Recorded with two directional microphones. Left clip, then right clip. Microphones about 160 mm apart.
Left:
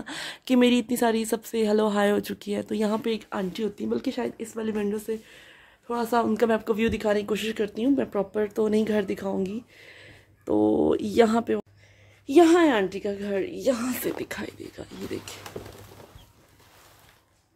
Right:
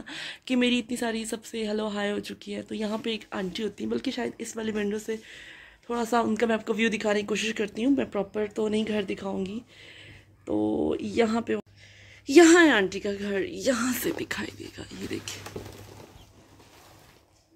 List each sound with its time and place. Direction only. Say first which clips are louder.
0.0 s speech: left 2 dB; 30° left (ahead or behind); by 4.5 s 10° left (ahead or behind)
4.6 s speech: left 1 dB; centre (ahead or behind)
6.3 s speech: left 3 dB; 15° left (ahead or behind)
10.5 s speech: left 5 dB; 35° left (ahead or behind)
12.3 s a woman's voice: right 1 dB; 5° right (ahead or behind); by 14.9 s 20° left (ahead or behind)
15.0 s speech: right 1 dB; 5° left (ahead or behind)